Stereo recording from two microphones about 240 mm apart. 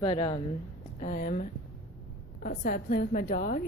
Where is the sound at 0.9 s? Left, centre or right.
Left.